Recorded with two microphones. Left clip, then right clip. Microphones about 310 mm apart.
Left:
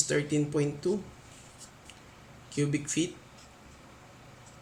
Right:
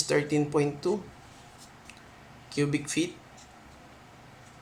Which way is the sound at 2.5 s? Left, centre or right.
Centre.